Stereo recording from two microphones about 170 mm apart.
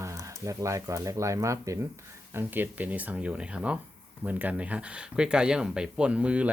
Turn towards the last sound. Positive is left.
turn(degrees=-5)  # may be behind; listen again after turning